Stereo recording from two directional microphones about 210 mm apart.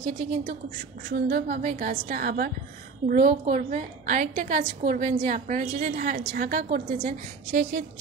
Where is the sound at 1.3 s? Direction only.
40° right (ahead or behind).